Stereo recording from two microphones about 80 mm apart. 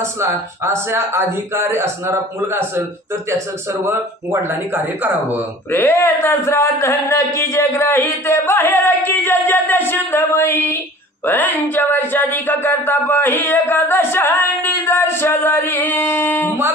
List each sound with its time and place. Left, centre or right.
0.0 s speech: right
5.7 s speech: left
11.2 s a sound: left